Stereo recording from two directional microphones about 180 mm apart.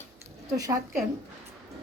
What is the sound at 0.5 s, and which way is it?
Speech, 20° right (ahead or behind).